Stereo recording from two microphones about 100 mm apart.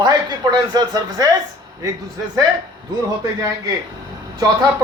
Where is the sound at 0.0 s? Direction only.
45° right (ahead or behind).